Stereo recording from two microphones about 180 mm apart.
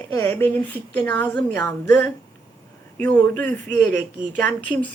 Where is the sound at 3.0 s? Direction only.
10° left (ahead or behind).